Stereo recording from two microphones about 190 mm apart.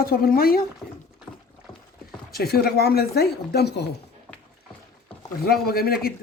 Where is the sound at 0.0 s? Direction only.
50° left (ahead or behind).